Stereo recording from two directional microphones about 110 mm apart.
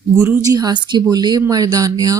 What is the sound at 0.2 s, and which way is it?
Speech, 30° right (ahead or behind).